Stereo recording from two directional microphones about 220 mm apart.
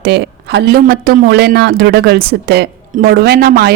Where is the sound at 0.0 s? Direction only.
45° right (ahead or behind).